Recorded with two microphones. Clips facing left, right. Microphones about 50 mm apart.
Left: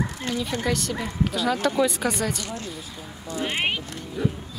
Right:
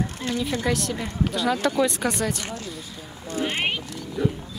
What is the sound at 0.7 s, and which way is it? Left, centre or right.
Speech, centre.